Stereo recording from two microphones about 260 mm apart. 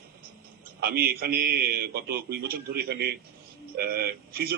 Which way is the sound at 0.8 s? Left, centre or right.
Right.